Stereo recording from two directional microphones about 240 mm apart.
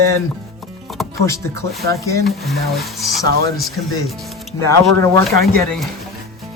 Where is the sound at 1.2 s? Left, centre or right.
Centre.